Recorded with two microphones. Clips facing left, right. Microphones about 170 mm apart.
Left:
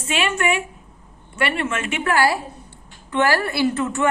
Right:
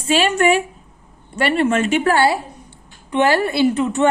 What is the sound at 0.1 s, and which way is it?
A woman's voice, 35° right (ahead or behind).